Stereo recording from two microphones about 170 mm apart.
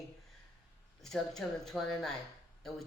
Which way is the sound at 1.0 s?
Centre (ahead or behind).